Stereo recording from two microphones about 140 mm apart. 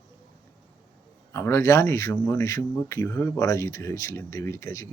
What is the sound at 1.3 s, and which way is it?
Speech, 20° left (ahead or behind).